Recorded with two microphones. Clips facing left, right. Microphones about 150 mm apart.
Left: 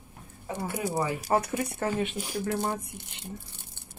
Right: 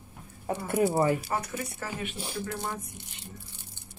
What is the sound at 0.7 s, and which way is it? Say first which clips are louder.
Speech: right 6 dB; 50° right (ahead or behind).